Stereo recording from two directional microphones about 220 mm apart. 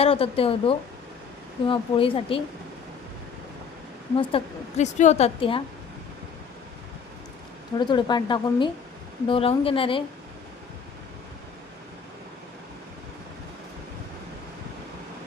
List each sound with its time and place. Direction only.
0.0 s a woman's voice: 25° left (ahead or behind)
4.1 s a woman's voice: 25° left (ahead or behind)
7.8 s a woman's voice: 20° left (ahead or behind)